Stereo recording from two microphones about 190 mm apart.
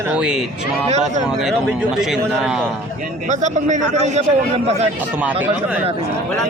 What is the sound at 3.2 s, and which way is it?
Speech, 40° right (ahead or behind).